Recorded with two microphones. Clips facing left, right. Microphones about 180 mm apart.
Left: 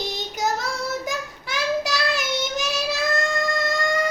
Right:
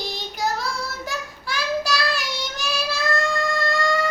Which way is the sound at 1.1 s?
20° left (ahead or behind).